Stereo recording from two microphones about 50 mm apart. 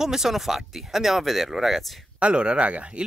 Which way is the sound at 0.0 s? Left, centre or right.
Centre.